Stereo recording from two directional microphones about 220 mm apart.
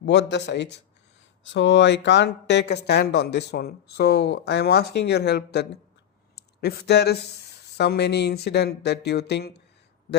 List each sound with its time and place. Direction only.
0.0 s speech: 50° left (ahead or behind)